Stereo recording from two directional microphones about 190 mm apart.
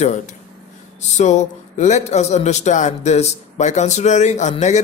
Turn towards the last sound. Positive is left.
turn(degrees=40)  # may be behind; listen again after turning